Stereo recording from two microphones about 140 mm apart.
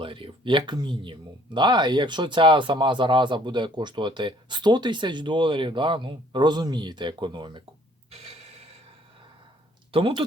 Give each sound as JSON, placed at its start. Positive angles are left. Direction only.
{"t": 0.0, "sound": "speech", "side_deg": -40}
{"t": 8.1, "sound": "a sound", "side_deg": -45}
{"t": 9.9, "sound": "speech", "side_deg": -40}